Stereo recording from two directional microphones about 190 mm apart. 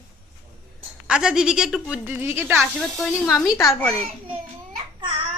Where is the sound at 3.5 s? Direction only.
15° left (ahead or behind).